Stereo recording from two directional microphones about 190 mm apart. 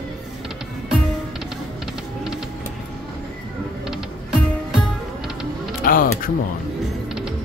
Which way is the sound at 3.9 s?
Centre (ahead or behind).